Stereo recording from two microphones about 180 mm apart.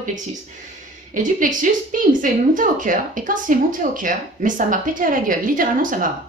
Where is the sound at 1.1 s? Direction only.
45° right (ahead or behind).